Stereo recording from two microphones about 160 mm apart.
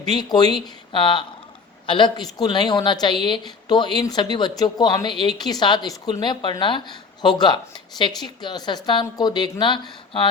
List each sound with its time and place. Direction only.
0.1 s a woman's voice: 25° left (ahead or behind)